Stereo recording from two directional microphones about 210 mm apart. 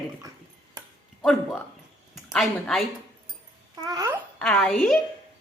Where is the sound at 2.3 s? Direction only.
Centre (ahead or behind).